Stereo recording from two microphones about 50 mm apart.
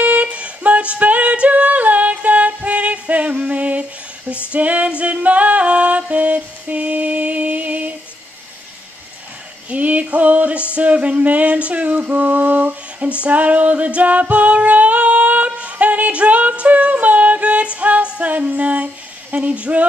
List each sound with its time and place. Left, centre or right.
0.0 s female singing: right
4.5 s music: right
9.7 s female singing: right
10.7 s a sound: right
13.2 s female singing: right
18.3 s a sound: right
19.3 s speech: right